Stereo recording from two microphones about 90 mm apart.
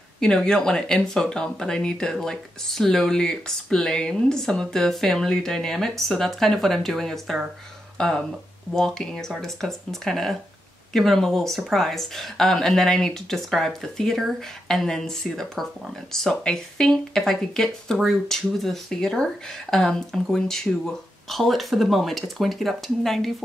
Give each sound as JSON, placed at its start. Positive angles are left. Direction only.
{"t": 0.2, "sound": "a woman's voice", "side_deg": 10}